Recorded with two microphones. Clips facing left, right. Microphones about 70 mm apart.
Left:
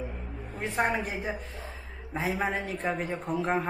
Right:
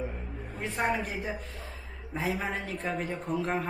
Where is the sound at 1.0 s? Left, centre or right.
Centre.